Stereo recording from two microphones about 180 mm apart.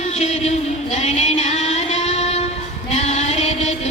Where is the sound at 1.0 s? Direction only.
40° left (ahead or behind).